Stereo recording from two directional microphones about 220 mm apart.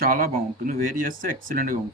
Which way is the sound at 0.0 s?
40° right (ahead or behind).